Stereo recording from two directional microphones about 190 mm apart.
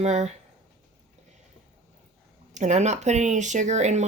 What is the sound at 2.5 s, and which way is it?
Speech, 40° right (ahead or behind).